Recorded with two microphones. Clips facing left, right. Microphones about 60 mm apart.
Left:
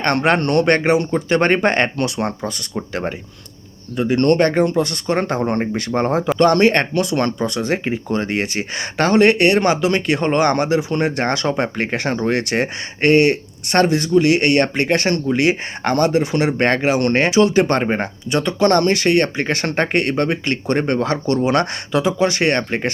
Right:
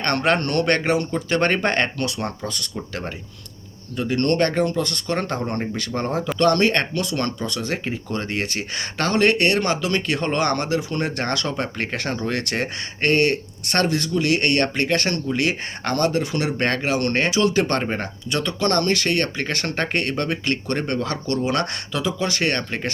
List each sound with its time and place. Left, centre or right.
0.0 s speech: centre